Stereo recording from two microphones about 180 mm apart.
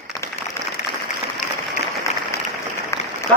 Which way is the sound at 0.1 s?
20° left (ahead or behind).